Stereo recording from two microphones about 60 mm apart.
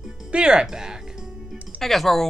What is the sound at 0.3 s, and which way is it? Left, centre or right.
Music, centre.